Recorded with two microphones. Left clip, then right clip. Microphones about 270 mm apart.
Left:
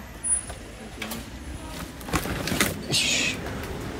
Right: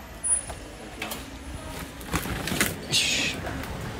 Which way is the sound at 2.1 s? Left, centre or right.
Centre.